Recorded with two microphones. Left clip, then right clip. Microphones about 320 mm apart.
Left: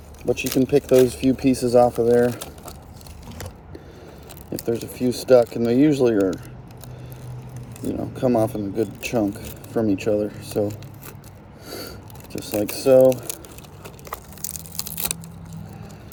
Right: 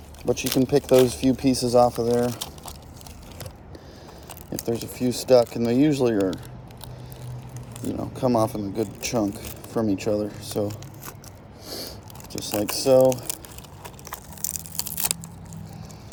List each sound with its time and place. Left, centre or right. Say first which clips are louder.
0.3 s speech: left 2 dB; centre
4.6 s speech: left 3 dB; centre
8.1 s speech: left 2 dB; centre
11.7 s a sound: left 1 dB; centre
15.0 s keys jangling: right 1 dB; centre